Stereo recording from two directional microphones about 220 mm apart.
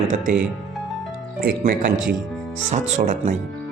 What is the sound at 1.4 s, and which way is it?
Speech, 40° right (ahead or behind).